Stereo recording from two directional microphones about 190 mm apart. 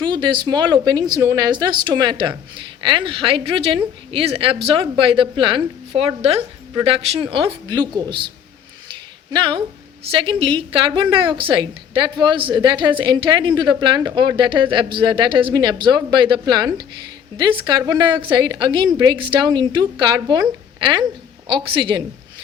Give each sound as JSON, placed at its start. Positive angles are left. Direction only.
{"t": 0.0, "sound": "a woman's voice", "side_deg": -25}
{"t": 8.9, "sound": "a sound", "side_deg": -25}
{"t": 10.1, "sound": "a woman's voice", "side_deg": -25}